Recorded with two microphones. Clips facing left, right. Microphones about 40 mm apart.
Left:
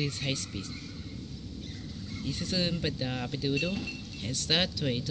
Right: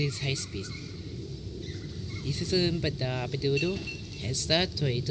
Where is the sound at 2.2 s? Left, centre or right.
Left.